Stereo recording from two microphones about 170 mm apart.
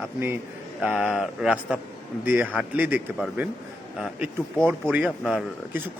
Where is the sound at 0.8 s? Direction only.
5° right (ahead or behind).